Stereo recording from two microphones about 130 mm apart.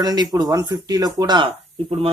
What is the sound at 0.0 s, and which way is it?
Speech, 30° right (ahead or behind).